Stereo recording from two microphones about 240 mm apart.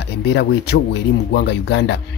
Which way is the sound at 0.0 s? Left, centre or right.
Left.